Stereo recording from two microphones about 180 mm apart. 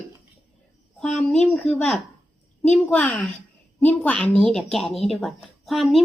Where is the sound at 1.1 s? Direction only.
5° left (ahead or behind).